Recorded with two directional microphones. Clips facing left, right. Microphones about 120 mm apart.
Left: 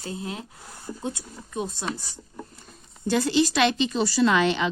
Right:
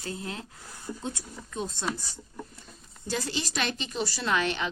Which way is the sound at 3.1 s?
70° left (ahead or behind).